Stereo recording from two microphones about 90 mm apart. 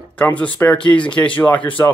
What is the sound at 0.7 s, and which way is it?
Speech, 10° left (ahead or behind).